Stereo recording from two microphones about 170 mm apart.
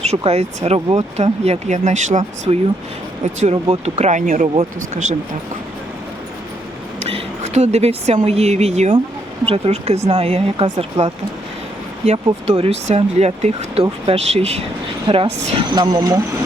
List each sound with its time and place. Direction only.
0.0 s speech: 40° right (ahead or behind)
7.0 s speech: 40° right (ahead or behind); by 16.2 s 20° right (ahead or behind)